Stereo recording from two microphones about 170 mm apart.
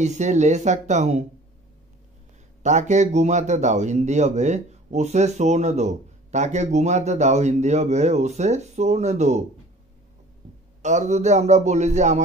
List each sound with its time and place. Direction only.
0.0 s speech: 45° right (ahead or behind)
2.6 s speech: 45° right (ahead or behind)
10.8 s speech: 45° right (ahead or behind)